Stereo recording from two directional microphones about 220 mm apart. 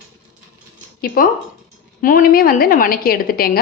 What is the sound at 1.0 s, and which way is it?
A woman's voice, 40° left (ahead or behind).